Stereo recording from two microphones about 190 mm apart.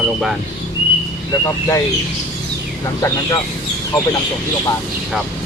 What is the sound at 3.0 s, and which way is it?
Speech, 20° left (ahead or behind).